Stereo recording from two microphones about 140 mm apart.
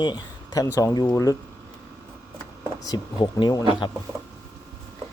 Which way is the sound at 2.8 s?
25° left (ahead or behind).